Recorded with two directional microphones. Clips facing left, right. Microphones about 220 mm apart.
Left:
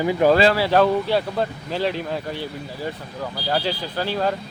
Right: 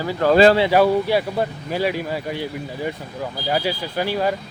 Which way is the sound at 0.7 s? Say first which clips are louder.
Right 1 dB; 10° right (ahead or behind).